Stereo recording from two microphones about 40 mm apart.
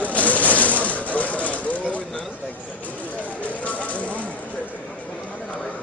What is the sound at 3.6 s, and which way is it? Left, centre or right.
Fire, left.